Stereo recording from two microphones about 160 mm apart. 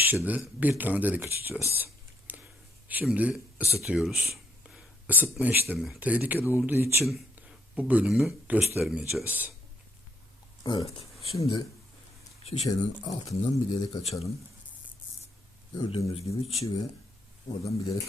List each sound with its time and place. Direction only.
0.3 s speech: 10° right (ahead or behind)
1.7 s a sound: 10° right (ahead or behind)
2.9 s speech: 10° right (ahead or behind)
10.6 s speech: 25° left (ahead or behind)
10.8 s speech: 40° left (ahead or behind)
12.4 s a sound: 40° left (ahead or behind)
12.6 s speech: 25° left (ahead or behind); by 14.3 s 40° left (ahead or behind)
15.7 s speech: 30° left (ahead or behind)
17.5 s speech: 25° left (ahead or behind)